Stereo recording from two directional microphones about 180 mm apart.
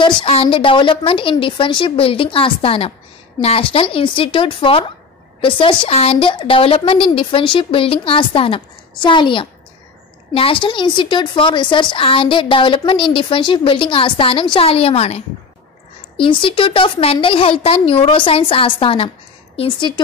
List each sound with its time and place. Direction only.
0.0 s a woman's voice: 30° left (ahead or behind)